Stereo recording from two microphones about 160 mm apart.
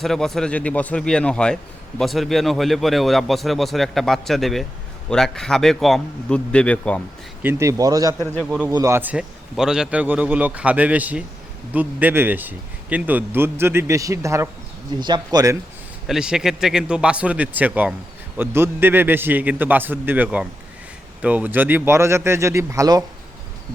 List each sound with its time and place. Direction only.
0.0 s a man's voice: centre (ahead or behind)
7.4 s speech: 20° right (ahead or behind)
8.4 s a man's voice: 5° right (ahead or behind)
8.7 s a man's voice: 20° right (ahead or behind)
16.0 s a man's voice: 5° right (ahead or behind); by 23.0 s 20° right (ahead or behind)